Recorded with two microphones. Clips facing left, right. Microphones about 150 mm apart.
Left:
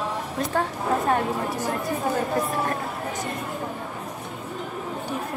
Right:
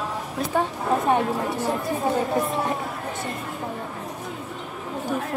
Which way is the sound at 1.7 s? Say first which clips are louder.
Right 2 dB; centre (ahead or behind).